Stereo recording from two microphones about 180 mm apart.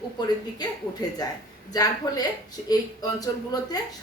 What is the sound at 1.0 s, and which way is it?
A woman's voice, 20° left (ahead or behind).